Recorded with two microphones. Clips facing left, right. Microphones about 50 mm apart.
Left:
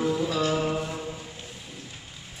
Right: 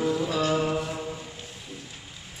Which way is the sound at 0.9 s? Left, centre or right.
Centre.